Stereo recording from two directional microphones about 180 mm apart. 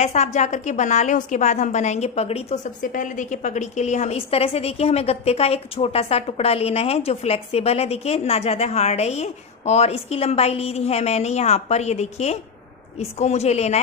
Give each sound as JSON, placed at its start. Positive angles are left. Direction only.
{"t": 0.0, "sound": "a woman's voice", "side_deg": 40}
{"t": 2.8, "sound": "a woman's voice", "side_deg": 45}